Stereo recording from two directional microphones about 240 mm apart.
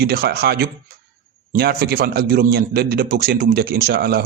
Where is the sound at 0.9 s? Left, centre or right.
Right.